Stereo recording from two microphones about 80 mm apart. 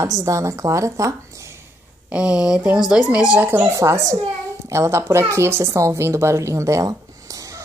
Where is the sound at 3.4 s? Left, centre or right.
Right.